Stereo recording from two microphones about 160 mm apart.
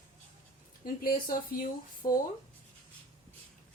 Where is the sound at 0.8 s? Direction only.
65° left (ahead or behind).